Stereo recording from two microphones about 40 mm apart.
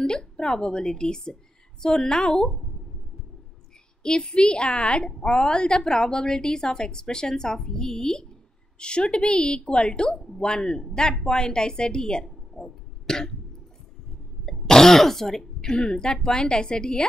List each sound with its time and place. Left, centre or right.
0.0 s a woman's voice: left
4.0 s a woman's voice: left
14.7 s speech: centre